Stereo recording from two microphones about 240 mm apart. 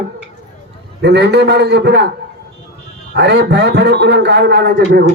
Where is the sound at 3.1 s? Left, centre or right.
Right.